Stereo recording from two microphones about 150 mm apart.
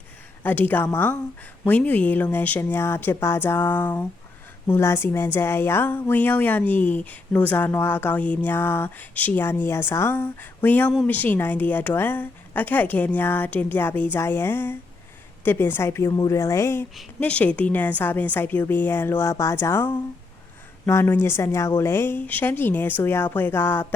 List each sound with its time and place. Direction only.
0.4 s speech: 10° left (ahead or behind)